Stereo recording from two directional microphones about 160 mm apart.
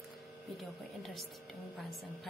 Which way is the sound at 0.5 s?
Centre (ahead or behind).